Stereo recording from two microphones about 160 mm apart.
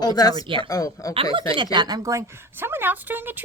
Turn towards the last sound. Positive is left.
turn(degrees=-10)  # may be behind; listen again after turning